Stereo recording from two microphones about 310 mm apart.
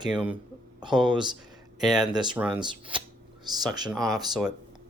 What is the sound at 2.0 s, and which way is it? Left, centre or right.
Speech, centre.